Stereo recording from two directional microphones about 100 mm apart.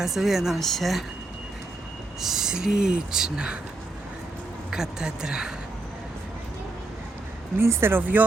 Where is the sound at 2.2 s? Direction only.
5° right (ahead or behind).